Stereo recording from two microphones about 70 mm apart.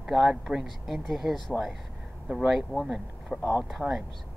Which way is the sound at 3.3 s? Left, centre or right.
Centre.